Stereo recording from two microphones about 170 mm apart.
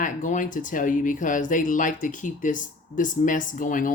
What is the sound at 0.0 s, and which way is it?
Speech, 50° left (ahead or behind).